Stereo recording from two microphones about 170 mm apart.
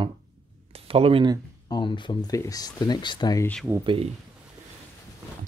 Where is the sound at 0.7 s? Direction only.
35° right (ahead or behind).